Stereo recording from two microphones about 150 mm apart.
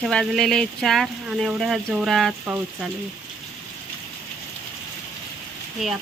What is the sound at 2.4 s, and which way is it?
Speech, 10° right (ahead or behind).